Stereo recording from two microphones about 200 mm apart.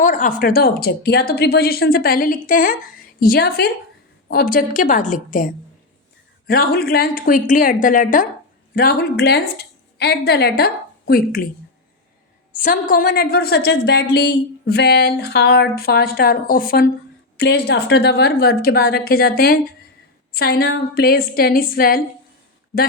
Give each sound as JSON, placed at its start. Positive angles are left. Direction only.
{"t": 0.0, "sound": "a woman's voice", "side_deg": 40}
{"t": 6.5, "sound": "a woman's voice", "side_deg": 50}
{"t": 12.5, "sound": "a woman's voice", "side_deg": 40}
{"t": 17.3, "sound": "a woman's voice", "side_deg": 55}